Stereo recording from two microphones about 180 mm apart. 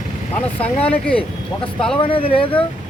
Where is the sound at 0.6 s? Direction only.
5° left (ahead or behind).